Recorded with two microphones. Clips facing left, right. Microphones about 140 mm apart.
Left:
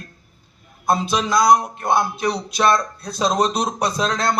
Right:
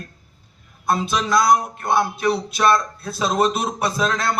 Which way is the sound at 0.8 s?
35° left (ahead or behind).